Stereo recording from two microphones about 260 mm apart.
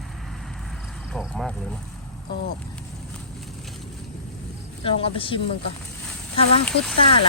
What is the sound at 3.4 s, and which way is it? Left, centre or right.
Vehicle, centre.